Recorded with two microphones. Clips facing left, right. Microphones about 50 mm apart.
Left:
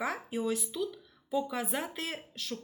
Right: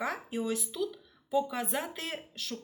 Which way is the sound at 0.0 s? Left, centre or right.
Centre.